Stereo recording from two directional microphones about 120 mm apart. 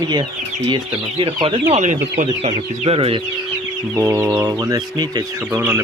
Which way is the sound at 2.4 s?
50° right (ahead or behind).